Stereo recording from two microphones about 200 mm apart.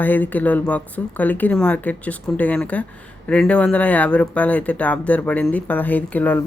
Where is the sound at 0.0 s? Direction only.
10° left (ahead or behind).